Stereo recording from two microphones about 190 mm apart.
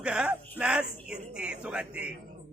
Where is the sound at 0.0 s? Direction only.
5° right (ahead or behind).